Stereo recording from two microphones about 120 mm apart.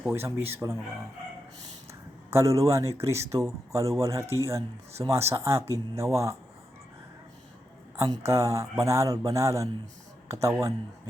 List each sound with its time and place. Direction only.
0.1 s speech: 20° right (ahead or behind)
1.9 s speech: 25° right (ahead or behind)
7.9 s speech: 25° right (ahead or behind)